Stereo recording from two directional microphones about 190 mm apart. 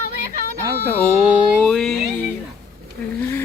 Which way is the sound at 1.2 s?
5° right (ahead or behind).